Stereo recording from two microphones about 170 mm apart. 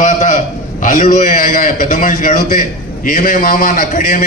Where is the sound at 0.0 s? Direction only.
45° left (ahead or behind).